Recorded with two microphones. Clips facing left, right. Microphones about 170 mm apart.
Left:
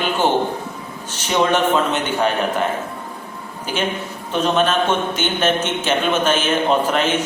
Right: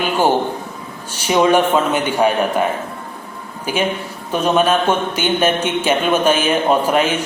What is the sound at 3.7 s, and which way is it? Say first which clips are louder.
A man's voice: right 3 dB; 10° right (ahead or behind).